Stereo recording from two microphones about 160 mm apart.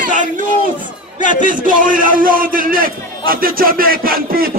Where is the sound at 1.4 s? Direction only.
55° right (ahead or behind).